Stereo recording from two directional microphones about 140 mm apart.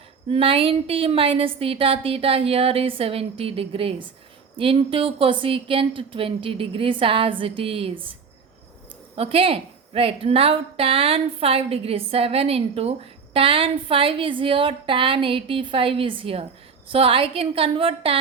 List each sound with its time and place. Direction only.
0.3 s a woman's voice: 40° right (ahead or behind)
9.1 s a woman's voice: 45° right (ahead or behind)